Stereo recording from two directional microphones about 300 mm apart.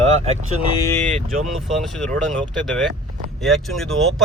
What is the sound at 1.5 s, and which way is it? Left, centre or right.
Speech, centre.